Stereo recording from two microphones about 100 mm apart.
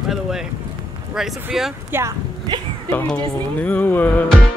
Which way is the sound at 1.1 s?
5° right (ahead or behind).